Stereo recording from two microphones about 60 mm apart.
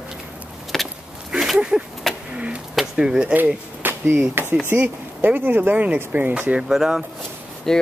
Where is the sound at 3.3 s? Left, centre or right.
Right.